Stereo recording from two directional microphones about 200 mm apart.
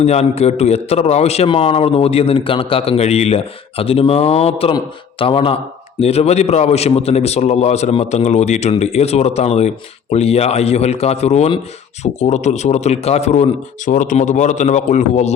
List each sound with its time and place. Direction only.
0.0 s a man's voice: 35° left (ahead or behind)